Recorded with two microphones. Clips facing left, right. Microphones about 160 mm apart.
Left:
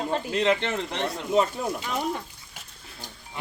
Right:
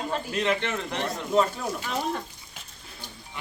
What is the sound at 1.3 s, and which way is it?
Speech, 15° left (ahead or behind).